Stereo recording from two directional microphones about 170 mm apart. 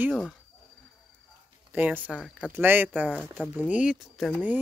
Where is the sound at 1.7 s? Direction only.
10° right (ahead or behind).